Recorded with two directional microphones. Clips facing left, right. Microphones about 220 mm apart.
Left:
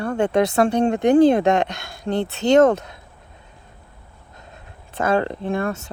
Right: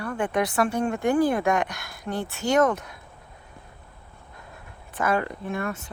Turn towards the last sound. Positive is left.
turn(degrees=30)  # may be behind; listen again after turning